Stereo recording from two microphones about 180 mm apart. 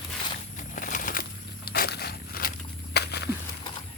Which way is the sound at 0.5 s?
45° left (ahead or behind).